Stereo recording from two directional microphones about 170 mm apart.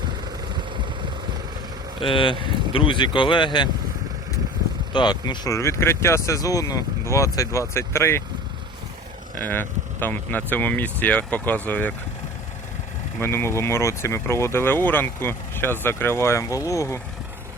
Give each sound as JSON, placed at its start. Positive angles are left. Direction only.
{"t": 2.0, "sound": "speech", "side_deg": 30}
{"t": 4.9, "sound": "speech", "side_deg": 25}
{"t": 9.4, "sound": "speech", "side_deg": 10}
{"t": 13.1, "sound": "speech", "side_deg": 15}